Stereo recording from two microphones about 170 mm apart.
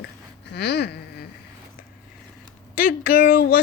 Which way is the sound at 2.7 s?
55° left (ahead or behind).